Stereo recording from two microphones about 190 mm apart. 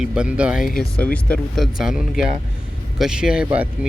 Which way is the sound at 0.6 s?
50° left (ahead or behind).